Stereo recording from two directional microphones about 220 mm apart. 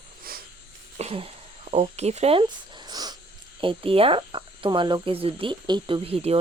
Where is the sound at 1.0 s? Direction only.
25° right (ahead or behind).